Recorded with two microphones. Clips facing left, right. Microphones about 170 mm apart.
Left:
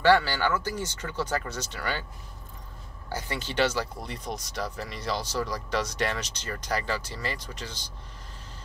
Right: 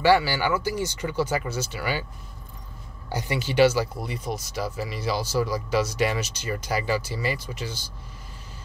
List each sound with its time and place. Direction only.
0.0 s speech: 10° right (ahead or behind)
3.1 s speech: 15° right (ahead or behind)